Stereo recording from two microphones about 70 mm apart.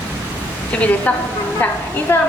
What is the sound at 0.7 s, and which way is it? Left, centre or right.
Speech, centre.